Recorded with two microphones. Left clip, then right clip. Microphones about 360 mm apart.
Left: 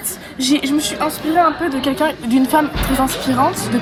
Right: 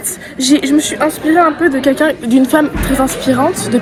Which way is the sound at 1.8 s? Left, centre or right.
Centre.